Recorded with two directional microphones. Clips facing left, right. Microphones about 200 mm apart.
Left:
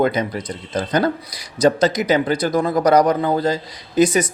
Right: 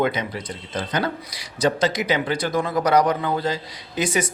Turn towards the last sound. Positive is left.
turn(degrees=40)  # may be behind; listen again after turning